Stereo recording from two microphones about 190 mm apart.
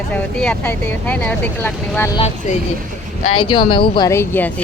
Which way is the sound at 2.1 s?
35° left (ahead or behind).